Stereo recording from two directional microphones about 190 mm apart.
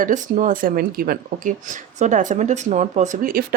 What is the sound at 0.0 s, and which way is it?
Speech, 40° right (ahead or behind).